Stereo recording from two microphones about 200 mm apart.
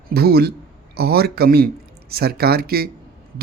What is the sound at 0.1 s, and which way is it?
A man's voice, 50° right (ahead or behind).